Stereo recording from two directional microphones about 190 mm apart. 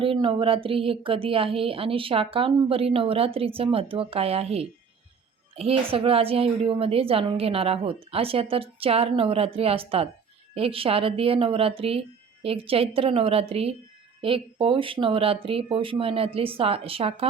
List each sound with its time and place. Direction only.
0.0 s a woman's voice: 25° right (ahead or behind)